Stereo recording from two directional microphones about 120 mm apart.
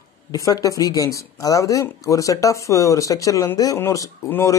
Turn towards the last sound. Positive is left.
turn(degrees=20)  # may be behind; listen again after turning